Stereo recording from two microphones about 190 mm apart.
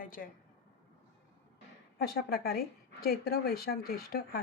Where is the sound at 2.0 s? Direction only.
55° left (ahead or behind).